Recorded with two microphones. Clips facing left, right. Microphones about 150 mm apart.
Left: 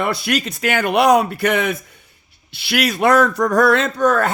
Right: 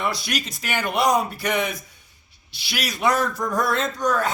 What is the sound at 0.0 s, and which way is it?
Speech, 60° left (ahead or behind).